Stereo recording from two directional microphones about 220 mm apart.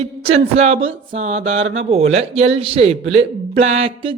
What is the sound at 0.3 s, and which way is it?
Speech, 25° right (ahead or behind).